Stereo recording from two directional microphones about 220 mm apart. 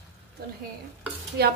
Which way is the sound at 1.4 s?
45° right (ahead or behind).